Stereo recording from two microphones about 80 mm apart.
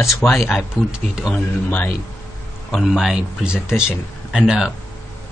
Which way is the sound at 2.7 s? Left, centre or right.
Centre.